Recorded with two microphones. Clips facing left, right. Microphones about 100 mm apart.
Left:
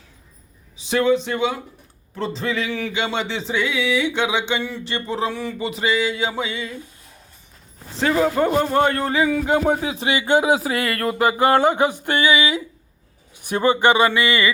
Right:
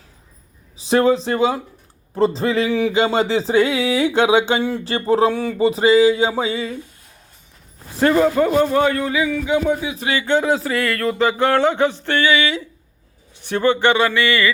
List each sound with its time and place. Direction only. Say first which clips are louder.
0.8 s speech: right 3 dB; 35° right (ahead or behind)
7.9 s a man's voice: right 4 dB; centre (ahead or behind)
8.4 s a man's voice: right 2 dB; 25° left (ahead or behind)
9.4 s speech: even; 50° left (ahead or behind)
9.9 s a sound: even; 25° left (ahead or behind)